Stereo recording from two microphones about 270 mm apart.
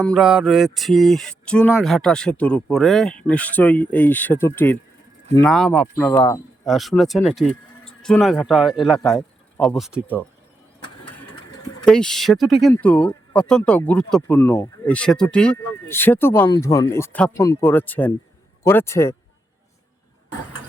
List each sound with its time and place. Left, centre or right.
0.0 s speech: centre
6.7 s speech: centre
11.9 s speech: centre